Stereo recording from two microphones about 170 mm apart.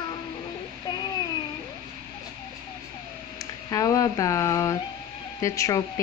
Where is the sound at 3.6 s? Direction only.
20° left (ahead or behind).